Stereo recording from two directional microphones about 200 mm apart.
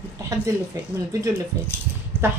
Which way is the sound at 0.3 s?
15° right (ahead or behind).